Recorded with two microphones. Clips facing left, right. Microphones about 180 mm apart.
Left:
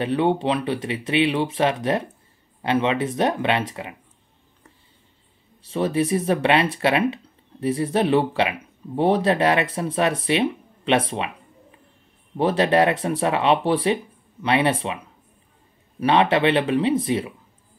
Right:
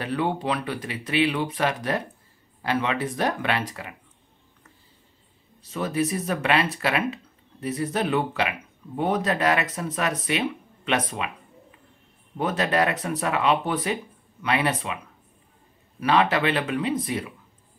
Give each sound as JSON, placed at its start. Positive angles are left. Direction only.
{"t": 0.0, "sound": "speech", "side_deg": 25}
{"t": 5.6, "sound": "speech", "side_deg": 30}
{"t": 12.4, "sound": "speech", "side_deg": 30}
{"t": 16.0, "sound": "speech", "side_deg": 25}